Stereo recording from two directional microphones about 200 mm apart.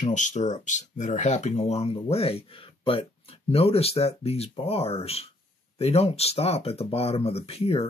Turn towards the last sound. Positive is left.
turn(degrees=30)  # may be behind; listen again after turning